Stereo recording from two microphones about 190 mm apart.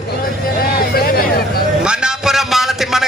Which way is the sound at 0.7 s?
50° left (ahead or behind).